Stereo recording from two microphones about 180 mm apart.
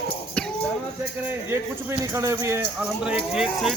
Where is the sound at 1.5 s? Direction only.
15° right (ahead or behind).